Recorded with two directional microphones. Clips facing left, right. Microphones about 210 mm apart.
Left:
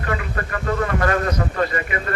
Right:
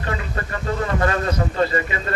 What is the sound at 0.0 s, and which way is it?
Speech, 25° right (ahead or behind).